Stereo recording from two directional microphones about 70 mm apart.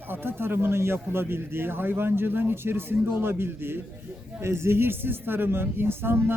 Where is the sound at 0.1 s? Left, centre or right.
Right.